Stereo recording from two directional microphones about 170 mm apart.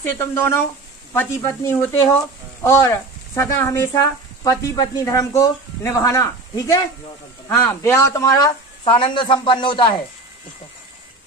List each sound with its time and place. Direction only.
0.0 s a man's voice: 10° left (ahead or behind); by 9.9 s 30° left (ahead or behind)